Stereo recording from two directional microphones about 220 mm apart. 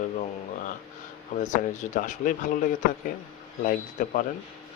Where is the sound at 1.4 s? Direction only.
35° left (ahead or behind).